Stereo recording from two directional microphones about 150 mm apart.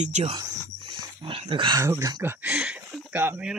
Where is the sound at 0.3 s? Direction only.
30° right (ahead or behind).